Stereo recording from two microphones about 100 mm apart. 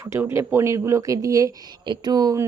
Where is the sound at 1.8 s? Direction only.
45° right (ahead or behind).